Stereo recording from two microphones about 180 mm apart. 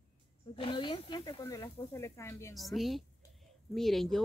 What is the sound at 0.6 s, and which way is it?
Speech, 25° left (ahead or behind).